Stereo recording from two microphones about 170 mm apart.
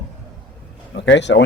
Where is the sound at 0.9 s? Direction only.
90° left.